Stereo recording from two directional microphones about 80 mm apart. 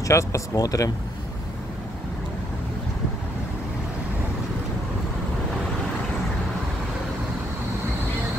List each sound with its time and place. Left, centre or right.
0.0 s speech: left